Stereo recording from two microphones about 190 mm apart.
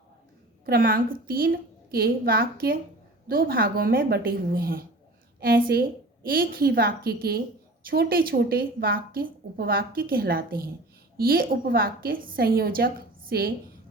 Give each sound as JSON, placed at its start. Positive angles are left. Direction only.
{"t": 0.6, "sound": "a woman's voice", "side_deg": -50}